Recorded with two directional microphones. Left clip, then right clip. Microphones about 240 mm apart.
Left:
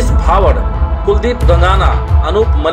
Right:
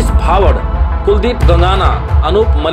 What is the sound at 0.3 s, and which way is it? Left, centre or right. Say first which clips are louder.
Music: even; right.